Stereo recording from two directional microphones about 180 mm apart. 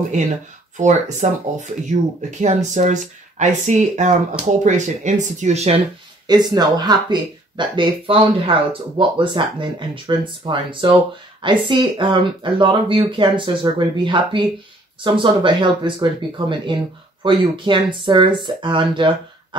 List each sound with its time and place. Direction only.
0.7 s speech: 40° right (ahead or behind)
6.2 s speech: 20° right (ahead or behind)